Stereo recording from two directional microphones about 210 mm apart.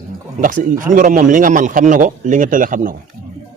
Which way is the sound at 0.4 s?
40° right (ahead or behind).